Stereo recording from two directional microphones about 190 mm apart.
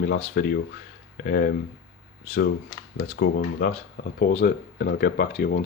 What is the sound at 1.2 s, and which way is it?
Speech, 55° left (ahead or behind).